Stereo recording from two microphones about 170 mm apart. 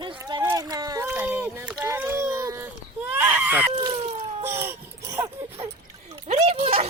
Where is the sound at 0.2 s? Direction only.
25° right (ahead or behind).